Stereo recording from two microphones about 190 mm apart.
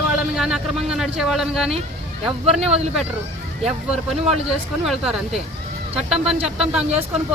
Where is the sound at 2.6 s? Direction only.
35° right (ahead or behind).